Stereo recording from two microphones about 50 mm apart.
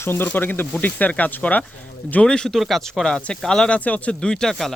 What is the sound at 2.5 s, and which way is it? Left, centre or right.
Speech, centre.